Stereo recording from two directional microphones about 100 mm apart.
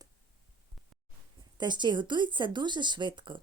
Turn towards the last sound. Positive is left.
turn(degrees=-50)  # may be behind; listen again after turning